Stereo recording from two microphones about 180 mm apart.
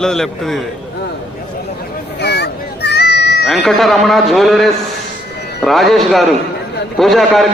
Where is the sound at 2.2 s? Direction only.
70° left (ahead or behind).